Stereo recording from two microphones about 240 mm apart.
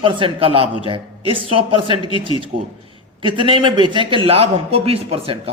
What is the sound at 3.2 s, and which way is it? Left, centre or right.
A man's voice, right.